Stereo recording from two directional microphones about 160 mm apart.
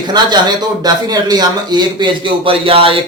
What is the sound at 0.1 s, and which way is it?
Speech, 30° right (ahead or behind).